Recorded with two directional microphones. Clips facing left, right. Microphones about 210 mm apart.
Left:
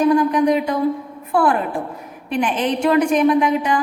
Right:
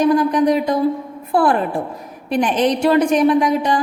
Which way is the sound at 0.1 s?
35° right (ahead or behind).